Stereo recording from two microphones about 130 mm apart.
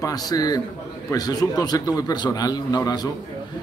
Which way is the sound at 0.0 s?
30° left (ahead or behind).